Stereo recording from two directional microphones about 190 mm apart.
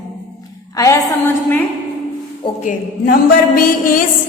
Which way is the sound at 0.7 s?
15° left (ahead or behind).